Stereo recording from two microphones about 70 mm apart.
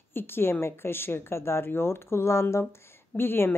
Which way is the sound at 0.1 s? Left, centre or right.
Left.